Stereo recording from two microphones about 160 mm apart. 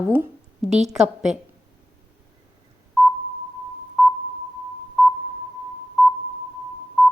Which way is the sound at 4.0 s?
Centre (ahead or behind).